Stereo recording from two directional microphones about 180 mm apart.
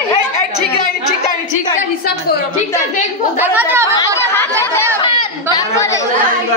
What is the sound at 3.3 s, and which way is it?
Speech, 15° right (ahead or behind).